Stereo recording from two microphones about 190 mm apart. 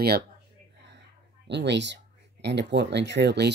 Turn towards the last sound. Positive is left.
turn(degrees=-60)  # may be behind; listen again after turning